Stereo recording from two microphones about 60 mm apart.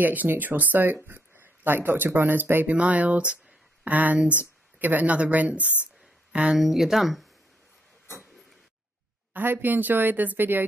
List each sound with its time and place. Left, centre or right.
0.0 s speech: right
2.7 s speech: right
6.5 s speech: centre
9.3 s speech: right